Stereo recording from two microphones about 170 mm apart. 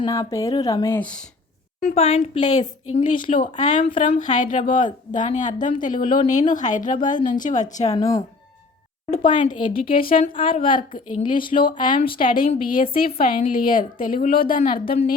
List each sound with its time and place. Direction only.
0.0 s speech: 20° left (ahead or behind)
1.8 s a woman's voice: 35° left (ahead or behind)
7.9 s speech: 20° left (ahead or behind)
9.1 s speech: 30° left (ahead or behind)
10.0 s a woman's voice: 60° left (ahead or behind)
10.3 s a woman's voice: 30° left (ahead or behind)
12.2 s a woman's voice: 55° left (ahead or behind)